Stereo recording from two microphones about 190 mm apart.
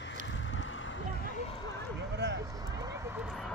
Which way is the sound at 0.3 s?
90° left.